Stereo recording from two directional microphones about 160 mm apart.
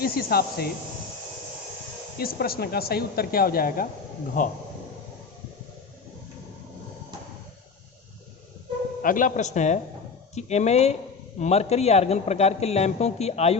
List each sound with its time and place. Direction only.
0.0 s a woman's voice: 70° left (ahead or behind)
2.1 s a woman's voice: 70° left (ahead or behind); by 4.5 s 55° left (ahead or behind)
9.0 s speech: 55° left (ahead or behind); by 13.6 s 40° left (ahead or behind)